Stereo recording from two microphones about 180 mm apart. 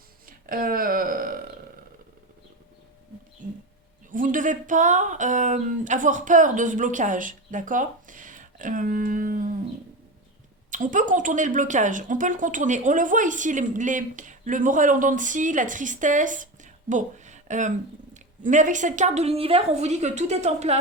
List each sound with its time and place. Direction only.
0.3 s speech: 50° right (ahead or behind)
4.1 s a woman's voice: 50° right (ahead or behind)
10.7 s a woman's voice: 45° right (ahead or behind)